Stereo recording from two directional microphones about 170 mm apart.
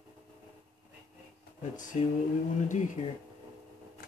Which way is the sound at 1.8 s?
50° left (ahead or behind).